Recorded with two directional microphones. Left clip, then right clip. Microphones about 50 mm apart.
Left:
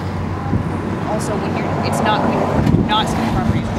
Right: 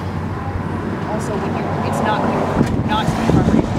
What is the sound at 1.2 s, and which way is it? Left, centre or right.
Speech, left.